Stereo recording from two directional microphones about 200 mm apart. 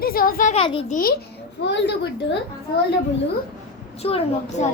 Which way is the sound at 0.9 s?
45° left (ahead or behind).